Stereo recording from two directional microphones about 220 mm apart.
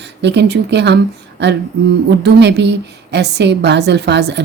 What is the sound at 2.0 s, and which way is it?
A woman's voice, 50° right (ahead or behind).